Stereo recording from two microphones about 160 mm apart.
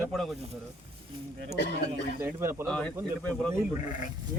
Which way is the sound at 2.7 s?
5° left (ahead or behind).